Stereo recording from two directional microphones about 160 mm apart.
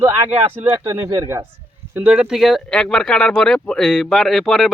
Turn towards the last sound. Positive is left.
turn(degrees=0)  # may be behind; listen again after turning